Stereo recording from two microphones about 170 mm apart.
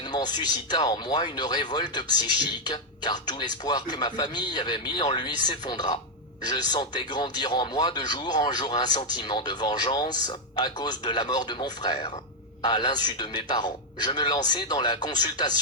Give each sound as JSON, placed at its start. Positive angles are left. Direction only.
{"t": 0.0, "sound": "speech", "side_deg": 25}